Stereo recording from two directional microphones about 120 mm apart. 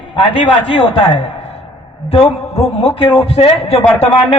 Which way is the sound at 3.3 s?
55° left (ahead or behind).